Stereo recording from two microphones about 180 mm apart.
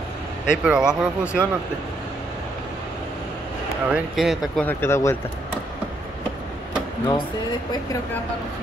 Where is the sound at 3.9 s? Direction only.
Centre (ahead or behind).